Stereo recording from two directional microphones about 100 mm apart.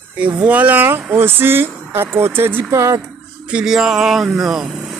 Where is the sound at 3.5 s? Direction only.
5° right (ahead or behind).